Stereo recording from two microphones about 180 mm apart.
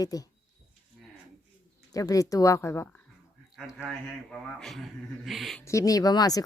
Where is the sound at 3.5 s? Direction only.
5° right (ahead or behind).